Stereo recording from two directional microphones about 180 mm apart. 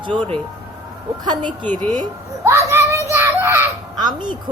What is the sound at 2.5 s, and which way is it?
Child singing, 15° right (ahead or behind).